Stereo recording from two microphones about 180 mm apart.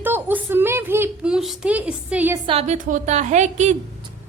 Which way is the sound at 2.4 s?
30° right (ahead or behind).